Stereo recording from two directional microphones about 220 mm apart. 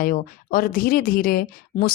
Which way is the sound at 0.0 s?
40° left (ahead or behind).